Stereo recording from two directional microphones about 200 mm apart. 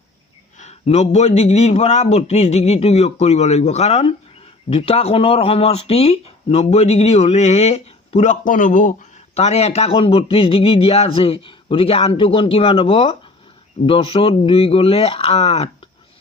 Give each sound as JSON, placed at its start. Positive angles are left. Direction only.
{"t": 0.6, "sound": "a man's voice", "side_deg": 35}